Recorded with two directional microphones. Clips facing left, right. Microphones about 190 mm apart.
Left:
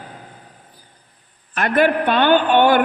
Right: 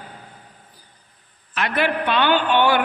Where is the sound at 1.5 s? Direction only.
50° left (ahead or behind).